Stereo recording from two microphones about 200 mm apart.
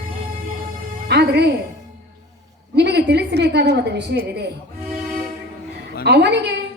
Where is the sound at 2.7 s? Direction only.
55° right (ahead or behind).